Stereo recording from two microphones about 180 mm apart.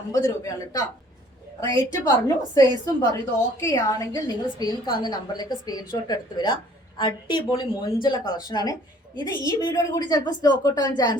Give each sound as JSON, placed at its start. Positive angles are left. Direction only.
{"t": 0.1, "sound": "a woman's voice", "side_deg": 20}